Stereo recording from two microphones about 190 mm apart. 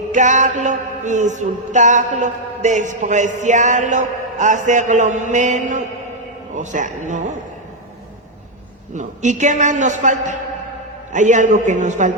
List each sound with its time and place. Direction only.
0.1 s mantra: 40° right (ahead or behind)
9.0 s mantra: 40° right (ahead or behind)